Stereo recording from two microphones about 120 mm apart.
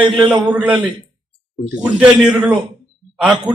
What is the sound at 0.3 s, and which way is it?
Speech, 10° right (ahead or behind).